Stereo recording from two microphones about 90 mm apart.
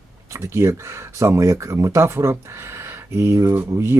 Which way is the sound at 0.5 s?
35° right (ahead or behind).